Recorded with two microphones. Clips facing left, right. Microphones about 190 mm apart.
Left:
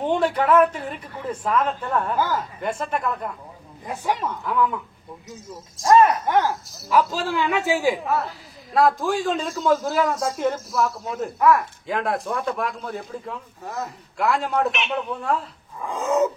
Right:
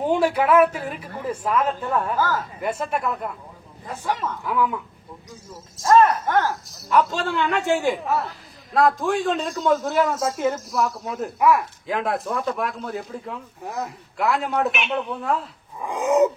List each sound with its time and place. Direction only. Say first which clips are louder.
0.0 s a woman's voice: right 1 dB; 10° right (ahead or behind)
3.8 s speech: left 1 dB; 15° left (ahead or behind)
4.5 s a man's voice: even; 5° right (ahead or behind)
5.9 s speech: even; 10° left (ahead or behind)
6.5 s a man's voice: even; centre (ahead or behind)
15.8 s a woman's voice: right 3 dB; 15° right (ahead or behind)